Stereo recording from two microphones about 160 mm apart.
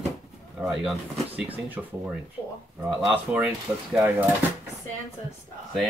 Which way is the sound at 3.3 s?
10° right (ahead or behind).